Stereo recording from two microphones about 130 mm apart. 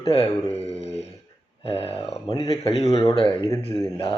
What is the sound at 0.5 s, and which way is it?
Mantra, 55° left (ahead or behind).